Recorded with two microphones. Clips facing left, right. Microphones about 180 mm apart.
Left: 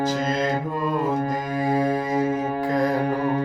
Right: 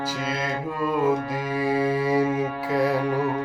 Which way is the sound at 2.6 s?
5° right (ahead or behind).